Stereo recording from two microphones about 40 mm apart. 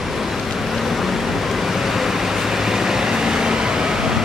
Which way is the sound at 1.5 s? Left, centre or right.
Centre.